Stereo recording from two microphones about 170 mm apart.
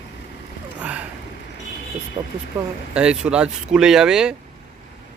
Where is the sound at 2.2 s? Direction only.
30° right (ahead or behind).